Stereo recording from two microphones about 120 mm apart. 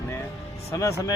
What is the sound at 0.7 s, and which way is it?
Speech, 25° left (ahead or behind).